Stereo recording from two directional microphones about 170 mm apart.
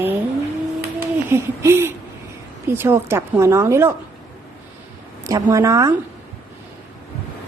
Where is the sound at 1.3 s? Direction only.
15° right (ahead or behind).